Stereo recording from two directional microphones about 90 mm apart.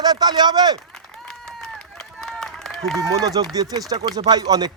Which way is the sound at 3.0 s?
45° right (ahead or behind).